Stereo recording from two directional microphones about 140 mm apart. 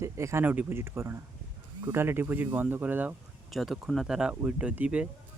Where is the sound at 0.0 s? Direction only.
20° right (ahead or behind).